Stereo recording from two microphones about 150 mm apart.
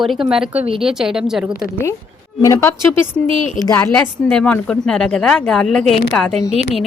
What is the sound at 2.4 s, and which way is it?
A woman's voice, 15° left (ahead or behind).